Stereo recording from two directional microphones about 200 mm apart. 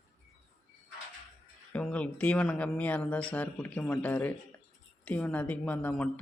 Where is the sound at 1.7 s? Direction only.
5° left (ahead or behind).